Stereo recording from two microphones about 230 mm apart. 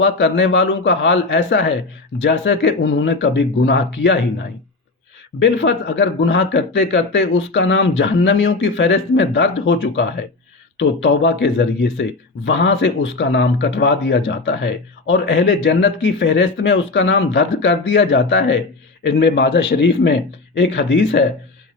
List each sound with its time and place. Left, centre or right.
0.0 s speech: left
5.4 s speech: left